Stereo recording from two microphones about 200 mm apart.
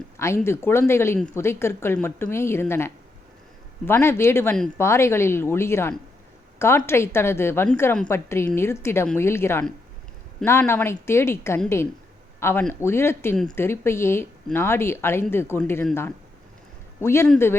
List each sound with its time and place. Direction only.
0.2 s a woman's voice: 15° left (ahead or behind)
17.0 s a woman's voice: 10° left (ahead or behind)